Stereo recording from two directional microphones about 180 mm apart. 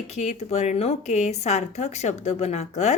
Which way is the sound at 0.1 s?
40° left (ahead or behind).